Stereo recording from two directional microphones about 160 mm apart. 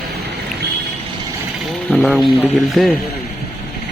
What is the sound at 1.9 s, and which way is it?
Speech, centre (ahead or behind).